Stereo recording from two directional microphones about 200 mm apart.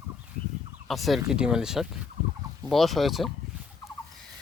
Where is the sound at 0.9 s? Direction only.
Centre (ahead or behind).